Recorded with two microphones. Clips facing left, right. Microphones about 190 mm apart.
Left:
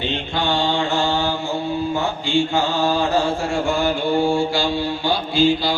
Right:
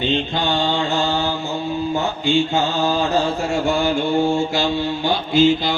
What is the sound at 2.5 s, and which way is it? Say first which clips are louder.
Mantra: even; 20° right (ahead or behind).